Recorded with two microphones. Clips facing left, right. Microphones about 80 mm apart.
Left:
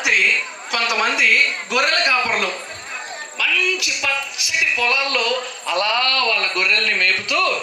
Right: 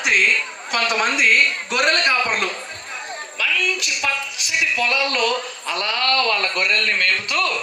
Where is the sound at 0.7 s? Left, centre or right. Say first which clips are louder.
Even; right.